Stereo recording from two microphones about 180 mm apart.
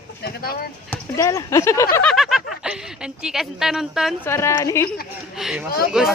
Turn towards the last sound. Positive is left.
turn(degrees=-5)  # may be behind; listen again after turning